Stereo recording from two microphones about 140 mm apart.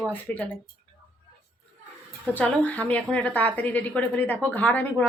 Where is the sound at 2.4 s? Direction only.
10° left (ahead or behind).